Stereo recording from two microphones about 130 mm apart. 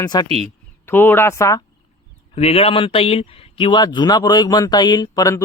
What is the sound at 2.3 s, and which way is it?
Speech, 50° left (ahead or behind).